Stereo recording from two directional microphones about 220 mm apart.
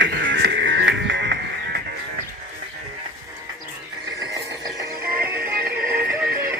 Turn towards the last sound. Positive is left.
turn(degrees=-10)  # may be behind; listen again after turning